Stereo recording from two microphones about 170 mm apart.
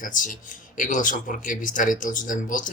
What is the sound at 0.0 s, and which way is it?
Speech, 50° left (ahead or behind).